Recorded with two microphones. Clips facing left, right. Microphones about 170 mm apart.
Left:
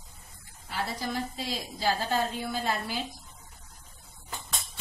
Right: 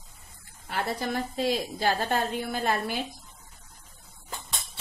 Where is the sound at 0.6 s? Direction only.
55° right (ahead or behind).